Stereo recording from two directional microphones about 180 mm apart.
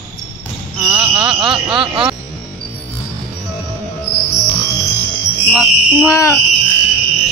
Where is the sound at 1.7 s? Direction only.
30° right (ahead or behind).